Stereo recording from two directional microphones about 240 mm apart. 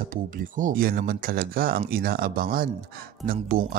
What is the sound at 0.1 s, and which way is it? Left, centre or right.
Speech, right.